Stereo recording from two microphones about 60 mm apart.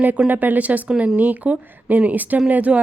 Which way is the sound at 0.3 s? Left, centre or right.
Right.